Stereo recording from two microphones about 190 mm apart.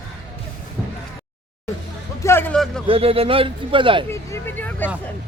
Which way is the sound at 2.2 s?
10° left (ahead or behind).